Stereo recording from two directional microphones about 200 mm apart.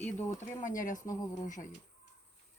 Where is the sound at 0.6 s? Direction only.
40° left (ahead or behind).